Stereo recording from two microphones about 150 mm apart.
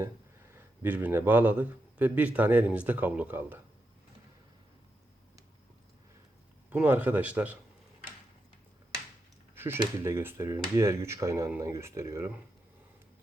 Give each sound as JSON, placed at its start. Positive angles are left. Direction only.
{"t": 0.5, "sound": "a man's voice", "side_deg": -15}
{"t": 6.7, "sound": "a man's voice", "side_deg": -10}
{"t": 9.6, "sound": "speech", "side_deg": -15}